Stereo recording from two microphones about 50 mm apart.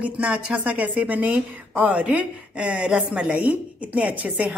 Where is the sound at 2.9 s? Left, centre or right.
Centre.